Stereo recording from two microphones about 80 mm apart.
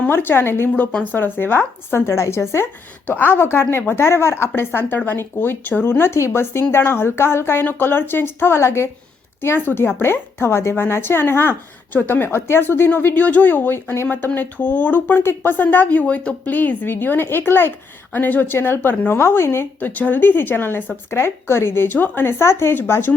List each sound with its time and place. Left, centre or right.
0.1 s a woman's voice: left